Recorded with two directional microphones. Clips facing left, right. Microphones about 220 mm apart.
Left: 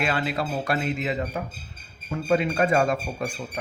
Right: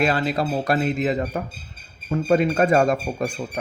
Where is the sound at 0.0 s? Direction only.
40° right (ahead or behind).